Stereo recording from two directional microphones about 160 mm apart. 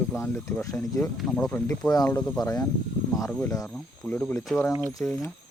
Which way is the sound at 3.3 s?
10° left (ahead or behind).